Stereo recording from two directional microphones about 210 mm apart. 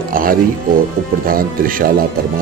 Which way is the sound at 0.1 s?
40° right (ahead or behind).